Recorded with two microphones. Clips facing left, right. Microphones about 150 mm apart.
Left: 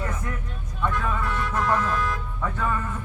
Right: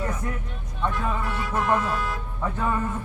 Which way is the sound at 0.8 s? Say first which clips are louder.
Even; 25° right (ahead or behind).